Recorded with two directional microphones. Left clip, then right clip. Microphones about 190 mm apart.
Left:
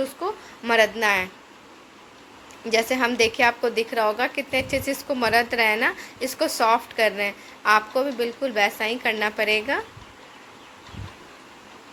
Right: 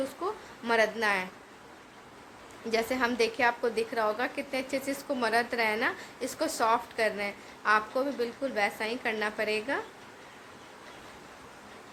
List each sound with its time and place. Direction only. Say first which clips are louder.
0.2 s a woman's voice: left 6 dB; 15° left (ahead or behind)
2.6 s a woman's voice: left 7 dB; 15° left (ahead or behind)